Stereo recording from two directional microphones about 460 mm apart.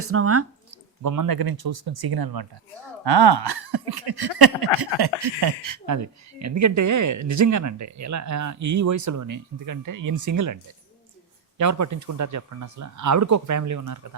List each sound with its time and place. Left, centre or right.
0.0 s speech: right
1.0 s speech: right